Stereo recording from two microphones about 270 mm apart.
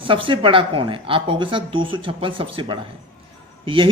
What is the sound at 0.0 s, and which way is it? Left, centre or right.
Speech, centre.